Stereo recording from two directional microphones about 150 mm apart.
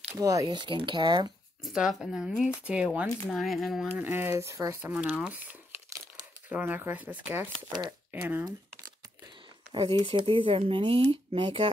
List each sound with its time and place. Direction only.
0.1 s speech: 20° right (ahead or behind)
1.6 s speech: 5° right (ahead or behind)
3.9 s speech: 15° right (ahead or behind)
4.9 s speech: 10° right (ahead or behind)
9.8 s speech: 30° right (ahead or behind)